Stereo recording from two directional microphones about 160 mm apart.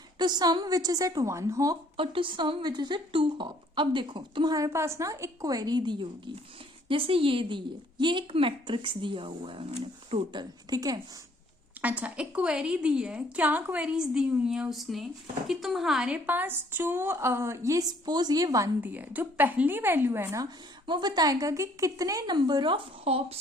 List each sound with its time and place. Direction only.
0.2 s speech: 25° right (ahead or behind)
2.0 s a woman's voice: 30° right (ahead or behind)
11.8 s a woman's voice: 10° right (ahead or behind); by 23.4 s 35° right (ahead or behind)